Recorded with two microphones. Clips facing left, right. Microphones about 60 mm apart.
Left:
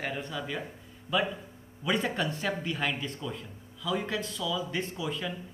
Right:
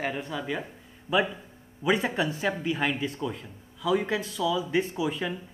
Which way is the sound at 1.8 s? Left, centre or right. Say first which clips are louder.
Right 4 dB; centre.